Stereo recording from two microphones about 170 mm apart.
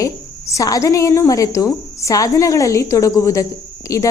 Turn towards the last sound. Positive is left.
turn(degrees=20)  # may be behind; listen again after turning